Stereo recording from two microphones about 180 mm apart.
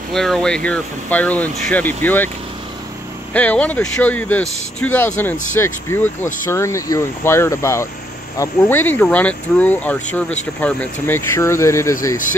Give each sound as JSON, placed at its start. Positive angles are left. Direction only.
{"t": 0.1, "sound": "speech", "side_deg": 0}
{"t": 3.3, "sound": "speech", "side_deg": 10}